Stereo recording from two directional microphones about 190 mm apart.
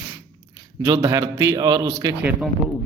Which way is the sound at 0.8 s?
20° right (ahead or behind).